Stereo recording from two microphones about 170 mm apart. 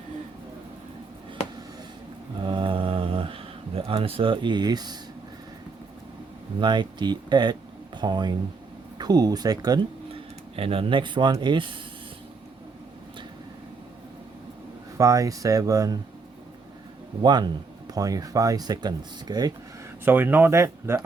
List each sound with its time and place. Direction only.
2.4 s a sound: 30° right (ahead or behind)
6.6 s speech: 25° right (ahead or behind)
10.5 s speech: 35° right (ahead or behind)
14.9 s speech: 20° right (ahead or behind)
17.2 s speech: 25° right (ahead or behind)
20.1 s speech: 10° right (ahead or behind)